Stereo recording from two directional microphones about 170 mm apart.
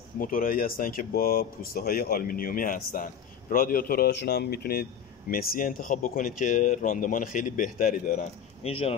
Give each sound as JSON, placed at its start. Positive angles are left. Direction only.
{"t": 0.2, "sound": "speech", "side_deg": 55}
{"t": 8.6, "sound": "speech", "side_deg": 35}